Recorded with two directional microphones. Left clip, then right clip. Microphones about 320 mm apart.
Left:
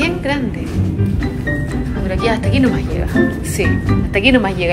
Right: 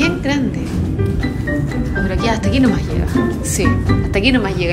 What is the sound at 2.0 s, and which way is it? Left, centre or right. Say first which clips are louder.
Speech: left 3 dB; centre.